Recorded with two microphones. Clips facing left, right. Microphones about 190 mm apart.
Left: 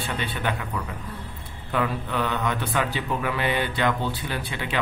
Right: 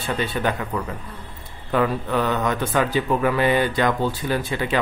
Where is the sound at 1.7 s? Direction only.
45° right (ahead or behind).